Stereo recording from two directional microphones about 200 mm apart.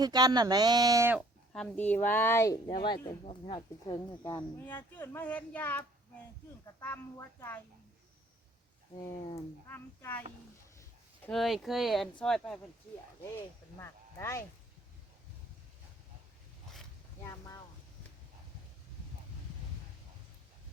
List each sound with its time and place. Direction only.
0.0 s speech: 20° right (ahead or behind)
1.5 s a child's voice: 10° left (ahead or behind); by 3.9 s 30° left (ahead or behind)
4.2 s a child's voice: 10° left (ahead or behind)
9.0 s speech: 25° left (ahead or behind)
9.6 s a child's voice: 10° left (ahead or behind)
13.7 s speech: 15° left (ahead or behind)